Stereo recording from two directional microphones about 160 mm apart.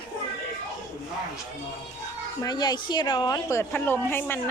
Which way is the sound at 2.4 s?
25° left (ahead or behind).